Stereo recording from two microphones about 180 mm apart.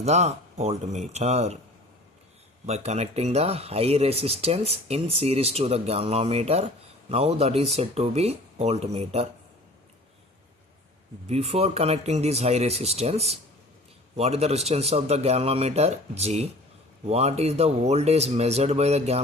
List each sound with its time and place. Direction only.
0.0 s speech: 35° right (ahead or behind)
2.6 s speech: 35° right (ahead or behind)
11.3 s speech: 35° right (ahead or behind)